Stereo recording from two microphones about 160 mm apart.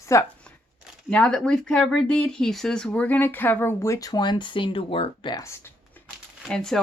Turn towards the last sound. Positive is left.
turn(degrees=5)  # may be behind; listen again after turning